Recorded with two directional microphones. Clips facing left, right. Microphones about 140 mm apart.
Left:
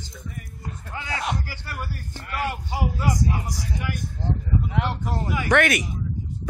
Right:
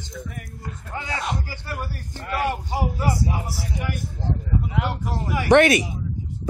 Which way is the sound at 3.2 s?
5° right (ahead or behind).